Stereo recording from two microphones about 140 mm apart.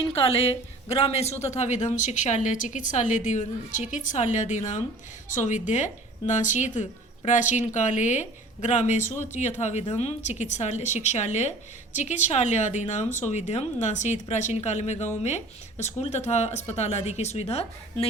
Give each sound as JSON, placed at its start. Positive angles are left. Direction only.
{"t": 0.1, "sound": "a woman's voice", "side_deg": 45}